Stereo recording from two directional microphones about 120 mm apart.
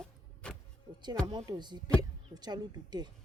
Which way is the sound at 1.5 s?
35° right (ahead or behind).